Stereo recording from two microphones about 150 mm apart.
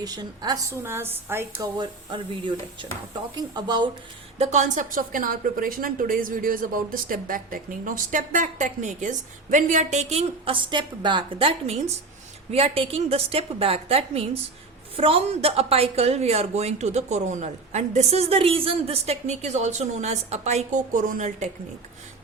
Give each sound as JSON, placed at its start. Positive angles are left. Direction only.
{"t": 0.0, "sound": "a woman's voice", "side_deg": -25}
{"t": 1.5, "sound": "a woman's voice", "side_deg": -30}
{"t": 4.4, "sound": "a woman's voice", "side_deg": -55}